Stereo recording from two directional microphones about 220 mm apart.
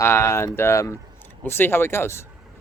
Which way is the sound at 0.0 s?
10° left (ahead or behind).